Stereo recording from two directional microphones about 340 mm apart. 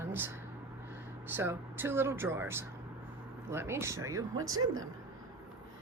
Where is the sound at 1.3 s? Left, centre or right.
Centre.